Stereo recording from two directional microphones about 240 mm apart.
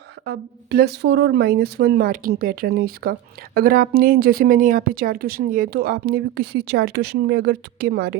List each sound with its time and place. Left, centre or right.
0.3 s speech: right